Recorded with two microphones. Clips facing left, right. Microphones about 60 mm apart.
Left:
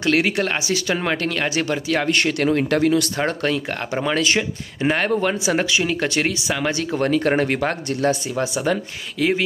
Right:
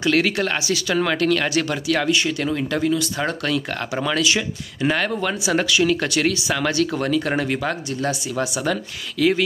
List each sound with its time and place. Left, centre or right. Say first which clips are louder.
0.0 s speech: even; left
2.0 s speech: left 2 dB; left
3.2 s speech: left 1 dB; left
7.0 s speech: left 3 dB; left